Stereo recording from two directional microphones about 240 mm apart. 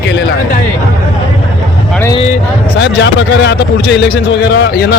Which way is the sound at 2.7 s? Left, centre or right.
Left.